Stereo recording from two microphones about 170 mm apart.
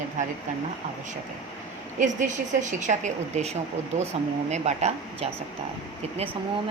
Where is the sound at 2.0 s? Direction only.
45° right (ahead or behind).